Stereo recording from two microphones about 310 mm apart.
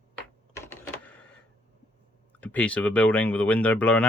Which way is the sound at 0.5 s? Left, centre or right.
Centre.